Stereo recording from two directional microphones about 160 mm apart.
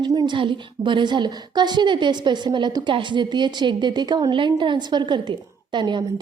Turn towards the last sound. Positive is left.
turn(degrees=-30)  # may be behind; listen again after turning